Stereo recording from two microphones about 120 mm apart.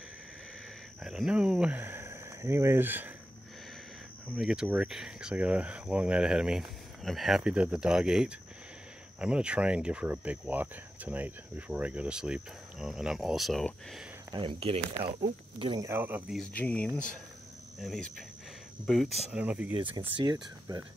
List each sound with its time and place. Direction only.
1.0 s speech: 5° right (ahead or behind)
4.4 s speech: 5° right (ahead or behind)
14.4 s speech: 55° right (ahead or behind)
15.8 s speech: 20° right (ahead or behind)
16.5 s speech: 10° left (ahead or behind)
19.4 s speech: 10° right (ahead or behind)
19.7 s speech: 45° right (ahead or behind)